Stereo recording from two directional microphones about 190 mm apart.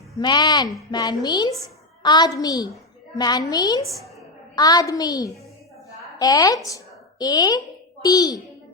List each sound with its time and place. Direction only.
0.2 s a child's voice: 20° left (ahead or behind)